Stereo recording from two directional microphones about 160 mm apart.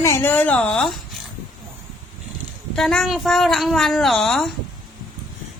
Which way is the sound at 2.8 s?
5° left (ahead or behind).